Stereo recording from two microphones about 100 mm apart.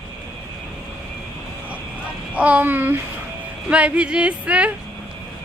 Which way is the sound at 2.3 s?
15° right (ahead or behind).